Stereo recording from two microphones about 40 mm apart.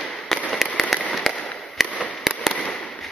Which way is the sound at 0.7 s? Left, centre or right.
Centre.